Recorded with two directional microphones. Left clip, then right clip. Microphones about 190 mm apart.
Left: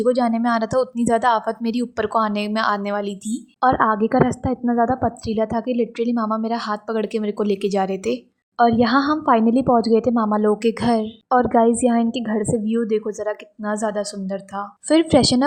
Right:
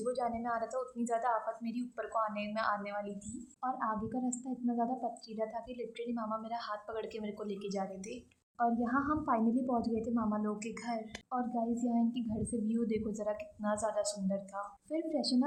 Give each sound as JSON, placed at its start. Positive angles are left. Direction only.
{"t": 0.0, "sound": "a woman's voice", "side_deg": 40}